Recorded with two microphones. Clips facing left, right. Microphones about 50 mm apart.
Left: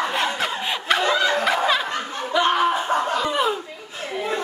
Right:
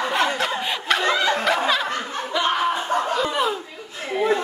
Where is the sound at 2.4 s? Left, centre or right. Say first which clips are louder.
Left 3 dB; centre.